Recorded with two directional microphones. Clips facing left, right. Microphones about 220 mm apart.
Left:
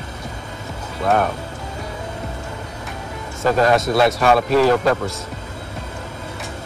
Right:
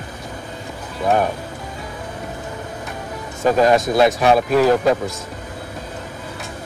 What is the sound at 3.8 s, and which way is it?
Speech, 20° right (ahead or behind).